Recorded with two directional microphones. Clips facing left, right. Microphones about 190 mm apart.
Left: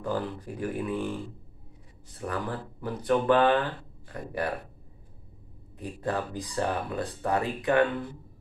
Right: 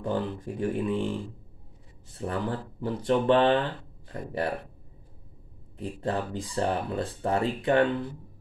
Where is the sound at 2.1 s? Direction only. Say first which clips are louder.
Right 2 dB; 25° right (ahead or behind).